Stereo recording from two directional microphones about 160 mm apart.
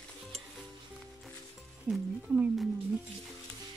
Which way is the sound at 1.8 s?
5° right (ahead or behind).